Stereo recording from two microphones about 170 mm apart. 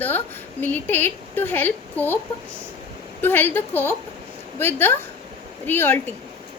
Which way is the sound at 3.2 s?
10° left (ahead or behind).